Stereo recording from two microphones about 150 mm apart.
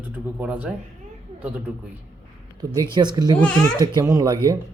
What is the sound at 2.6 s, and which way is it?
Speech, 25° right (ahead or behind).